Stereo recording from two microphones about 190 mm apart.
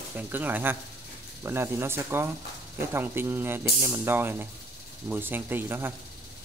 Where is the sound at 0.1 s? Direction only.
10° right (ahead or behind).